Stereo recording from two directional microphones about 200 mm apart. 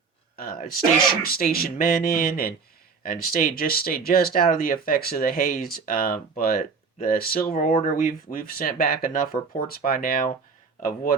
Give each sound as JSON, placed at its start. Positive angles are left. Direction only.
{"t": 0.3, "sound": "speech", "side_deg": 45}